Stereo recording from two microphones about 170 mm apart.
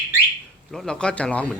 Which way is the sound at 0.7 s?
Centre (ahead or behind).